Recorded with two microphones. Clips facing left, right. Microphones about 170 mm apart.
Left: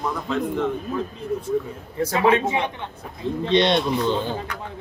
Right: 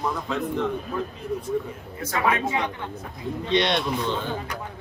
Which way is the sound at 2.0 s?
30° left (ahead or behind).